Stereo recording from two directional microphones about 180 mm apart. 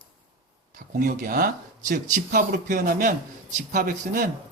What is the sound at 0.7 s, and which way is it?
Speech, 50° right (ahead or behind).